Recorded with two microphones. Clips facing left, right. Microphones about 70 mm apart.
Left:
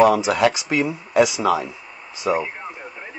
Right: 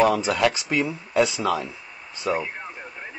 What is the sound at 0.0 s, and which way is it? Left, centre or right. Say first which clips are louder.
Speech: left 4 dB; centre.